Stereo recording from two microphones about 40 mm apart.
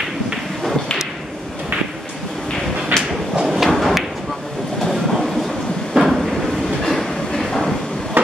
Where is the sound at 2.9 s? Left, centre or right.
Right.